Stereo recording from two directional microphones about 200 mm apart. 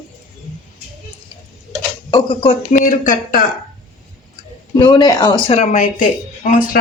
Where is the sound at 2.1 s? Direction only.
25° left (ahead or behind).